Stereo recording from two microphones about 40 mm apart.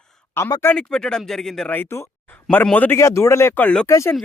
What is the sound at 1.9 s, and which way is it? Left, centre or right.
Speech, left.